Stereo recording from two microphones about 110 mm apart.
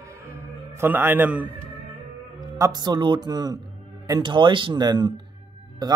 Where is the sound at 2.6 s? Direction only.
40° right (ahead or behind).